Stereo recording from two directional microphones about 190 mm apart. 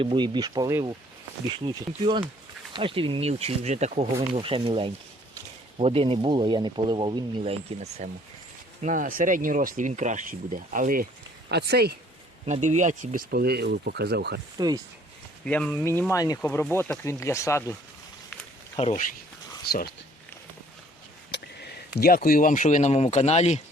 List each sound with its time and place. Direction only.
0.0 s speech: 25° right (ahead or behind)
8.8 s speech: 45° right (ahead or behind)
11.4 s speech: 60° right (ahead or behind)
12.5 s speech: 40° right (ahead or behind); by 14.4 s 60° right (ahead or behind)
15.4 s speech: 5° left (ahead or behind)
18.8 s speech: 35° left (ahead or behind)
21.9 s speech: 50° left (ahead or behind); by 23.6 s 35° left (ahead or behind)